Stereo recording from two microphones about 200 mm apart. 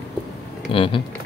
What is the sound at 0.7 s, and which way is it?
Speech, 25° left (ahead or behind).